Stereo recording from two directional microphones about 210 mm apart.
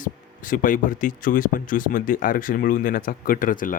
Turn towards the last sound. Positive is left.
turn(degrees=40)  # may be behind; listen again after turning